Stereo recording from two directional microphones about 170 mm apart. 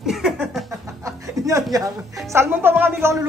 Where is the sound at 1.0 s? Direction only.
20° right (ahead or behind).